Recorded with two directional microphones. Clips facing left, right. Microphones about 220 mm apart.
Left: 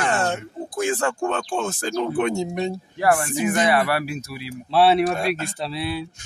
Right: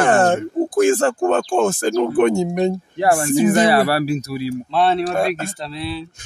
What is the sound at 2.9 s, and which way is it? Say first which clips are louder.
Speech: right 3 dB; 25° right (ahead or behind).